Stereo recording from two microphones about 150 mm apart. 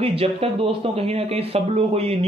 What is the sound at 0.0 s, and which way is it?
A man's voice, 40° right (ahead or behind).